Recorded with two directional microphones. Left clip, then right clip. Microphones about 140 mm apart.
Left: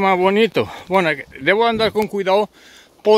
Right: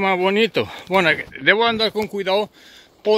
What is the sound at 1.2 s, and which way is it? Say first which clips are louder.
Speech: even; 20° left (ahead or behind).